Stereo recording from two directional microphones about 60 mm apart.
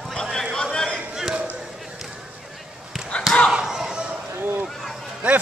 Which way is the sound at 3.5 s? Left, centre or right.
Centre.